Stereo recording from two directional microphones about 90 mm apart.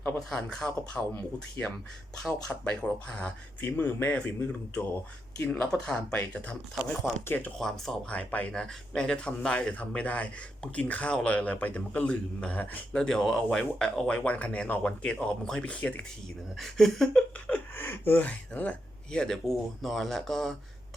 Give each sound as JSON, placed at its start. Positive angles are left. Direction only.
{"t": 0.4, "sound": "speech", "side_deg": 10}
{"t": 1.1, "sound": "speech", "side_deg": 20}
{"t": 7.6, "sound": "speech", "side_deg": 5}
{"t": 8.1, "sound": "speech", "side_deg": 15}
{"t": 16.6, "sound": "speech", "side_deg": 5}